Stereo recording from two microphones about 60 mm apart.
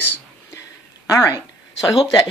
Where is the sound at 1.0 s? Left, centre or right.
Left.